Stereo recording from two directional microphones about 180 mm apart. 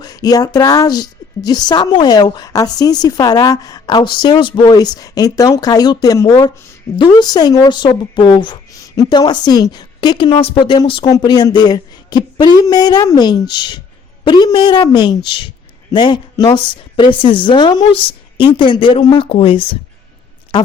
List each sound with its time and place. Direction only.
0.0 s a woman's voice: 20° left (ahead or behind)